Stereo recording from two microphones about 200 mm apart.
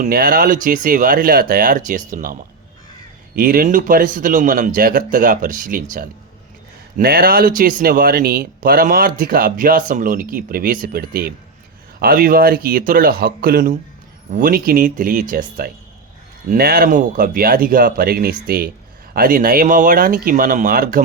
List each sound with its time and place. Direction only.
0.0 s speech: 45° right (ahead or behind)